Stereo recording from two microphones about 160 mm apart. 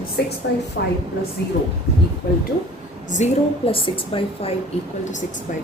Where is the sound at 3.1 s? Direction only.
40° left (ahead or behind).